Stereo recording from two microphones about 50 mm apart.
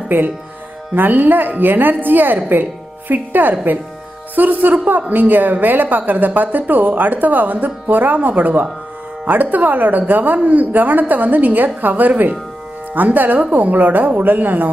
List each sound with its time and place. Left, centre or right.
0.1 s a woman's voice: right